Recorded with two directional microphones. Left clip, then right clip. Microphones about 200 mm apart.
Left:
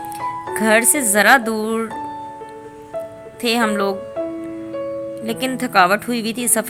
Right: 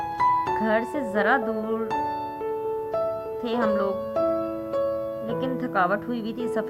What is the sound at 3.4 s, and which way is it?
Speech, 20° left (ahead or behind).